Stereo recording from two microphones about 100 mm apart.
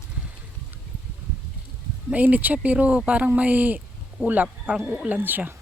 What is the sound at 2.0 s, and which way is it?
Speech, 15° right (ahead or behind).